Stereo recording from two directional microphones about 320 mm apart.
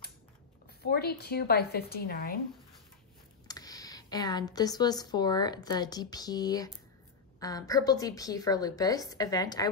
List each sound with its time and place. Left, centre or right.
0.7 s a woman's voice: left
3.4 s a woman's voice: centre